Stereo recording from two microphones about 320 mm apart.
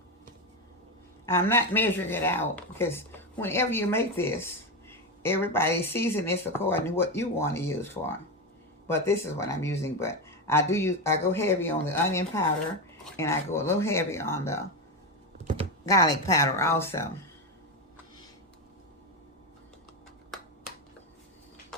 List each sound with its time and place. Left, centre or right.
1.3 s speech: centre
15.9 s speech: centre
21.7 s a sound: centre